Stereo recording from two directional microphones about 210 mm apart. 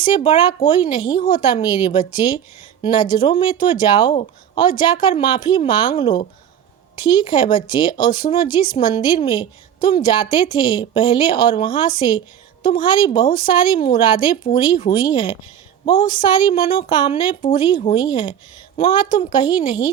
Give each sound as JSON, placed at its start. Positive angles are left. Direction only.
{"t": 0.0, "sound": "speech", "side_deg": 25}